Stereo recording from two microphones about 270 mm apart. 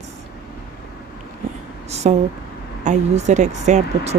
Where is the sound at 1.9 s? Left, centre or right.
Right.